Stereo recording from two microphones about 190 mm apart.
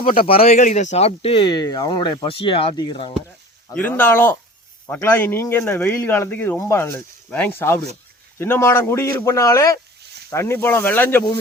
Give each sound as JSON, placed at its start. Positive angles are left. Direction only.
{"t": 0.3, "sound": "speech", "side_deg": 30}
{"t": 3.8, "sound": "speech", "side_deg": 10}